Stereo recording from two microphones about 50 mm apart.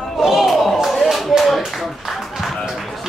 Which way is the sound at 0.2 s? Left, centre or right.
Centre.